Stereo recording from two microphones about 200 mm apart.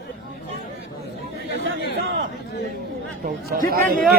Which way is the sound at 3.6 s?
45° right (ahead or behind).